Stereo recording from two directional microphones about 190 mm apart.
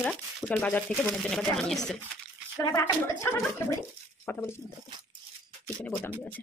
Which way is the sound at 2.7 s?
15° left (ahead or behind).